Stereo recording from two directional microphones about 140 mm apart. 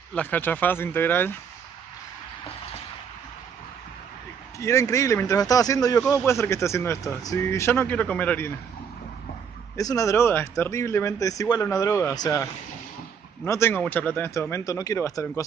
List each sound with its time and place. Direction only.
0.1 s speech: 10° left (ahead or behind)
4.6 s a man's voice: 20° left (ahead or behind)
9.8 s a man's voice: 25° left (ahead or behind)
13.5 s a man's voice: 15° left (ahead or behind)